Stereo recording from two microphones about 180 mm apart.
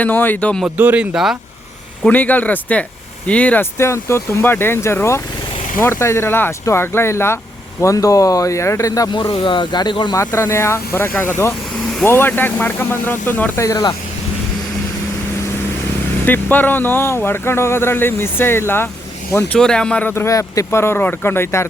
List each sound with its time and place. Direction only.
0.0 s speech: 10° left (ahead or behind)
0.6 s speech: 10° right (ahead or behind)
2.0 s speech: 10° left (ahead or behind)
16.2 s speech: 10° left (ahead or behind)
19.5 s speech: 5° left (ahead or behind)